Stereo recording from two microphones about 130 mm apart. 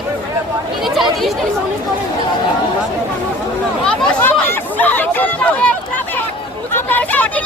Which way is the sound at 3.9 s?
10° left (ahead or behind).